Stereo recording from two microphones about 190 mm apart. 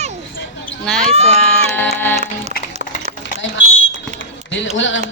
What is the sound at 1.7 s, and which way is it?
Music, 10° left (ahead or behind).